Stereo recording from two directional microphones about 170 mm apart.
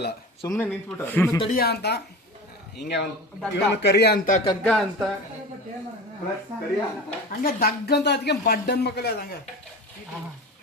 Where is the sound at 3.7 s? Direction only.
90° left; by 4.2 s 75° left (ahead or behind).